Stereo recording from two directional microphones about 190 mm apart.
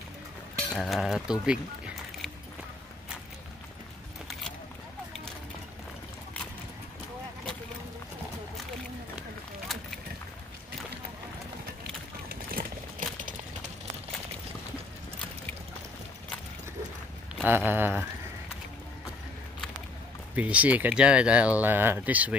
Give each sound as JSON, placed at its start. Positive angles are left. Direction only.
{"t": 0.7, "sound": "speech", "side_deg": 0}
{"t": 12.3, "sound": "a sound", "side_deg": -50}
{"t": 17.5, "sound": "speech", "side_deg": -10}
{"t": 20.3, "sound": "speech", "side_deg": -5}